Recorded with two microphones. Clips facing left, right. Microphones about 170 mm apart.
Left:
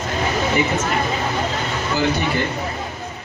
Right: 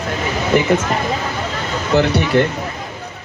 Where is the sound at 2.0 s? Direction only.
75° right (ahead or behind).